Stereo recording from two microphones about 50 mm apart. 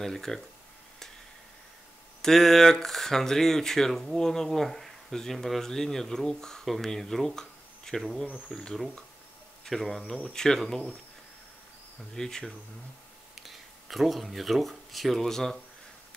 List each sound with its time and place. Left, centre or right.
0.0 s speech: centre
2.2 s speech: centre
9.7 s speech: centre
12.2 s speech: centre
13.4 s speech: centre